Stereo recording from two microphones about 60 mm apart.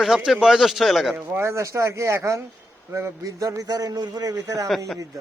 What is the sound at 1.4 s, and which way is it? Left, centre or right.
Speech, right.